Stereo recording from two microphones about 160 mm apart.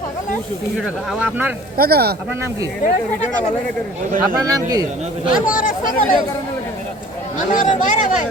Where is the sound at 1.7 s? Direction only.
70° right (ahead or behind).